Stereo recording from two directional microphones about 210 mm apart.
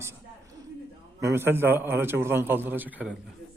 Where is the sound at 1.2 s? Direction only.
10° right (ahead or behind).